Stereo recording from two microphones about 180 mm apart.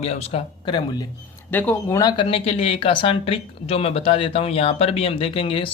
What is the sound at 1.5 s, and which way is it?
Speech, 10° left (ahead or behind).